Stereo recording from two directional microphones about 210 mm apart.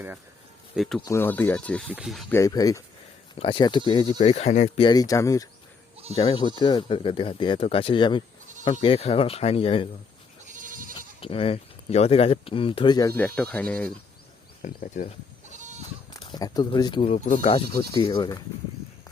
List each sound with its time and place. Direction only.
0.8 s speech: centre (ahead or behind)
2.3 s speech: 15° left (ahead or behind); by 4.9 s 35° left (ahead or behind)
4.9 s speech: 15° left (ahead or behind)
10.4 s goat: 40° right (ahead or behind)
10.9 s speech: 25° left (ahead or behind); by 13.9 s 5° left (ahead or behind)
14.6 s speech: 35° left (ahead or behind)
16.1 s speech: 20° left (ahead or behind); by 17.6 s 35° left (ahead or behind)
17.7 s speech: 25° left (ahead or behind)